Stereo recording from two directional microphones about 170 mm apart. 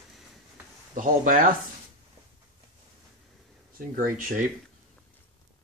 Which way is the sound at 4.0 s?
55° right (ahead or behind).